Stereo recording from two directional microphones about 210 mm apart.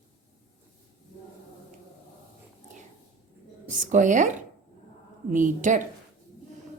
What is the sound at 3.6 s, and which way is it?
Speech, 35° right (ahead or behind).